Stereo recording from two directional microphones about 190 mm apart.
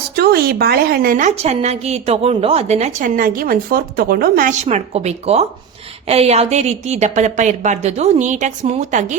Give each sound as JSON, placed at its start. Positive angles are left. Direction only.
{"t": 0.2, "sound": "a woman's voice", "side_deg": -55}
{"t": 3.2, "sound": "a woman's voice", "side_deg": -50}